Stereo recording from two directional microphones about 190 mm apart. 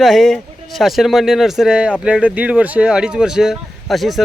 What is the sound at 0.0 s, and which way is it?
A man's voice, centre (ahead or behind).